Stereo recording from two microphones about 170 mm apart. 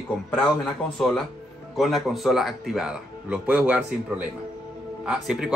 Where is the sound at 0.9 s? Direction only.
5° left (ahead or behind).